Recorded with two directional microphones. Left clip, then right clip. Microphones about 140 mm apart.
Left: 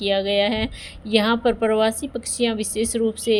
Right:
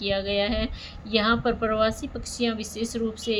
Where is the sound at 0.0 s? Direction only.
50° left (ahead or behind).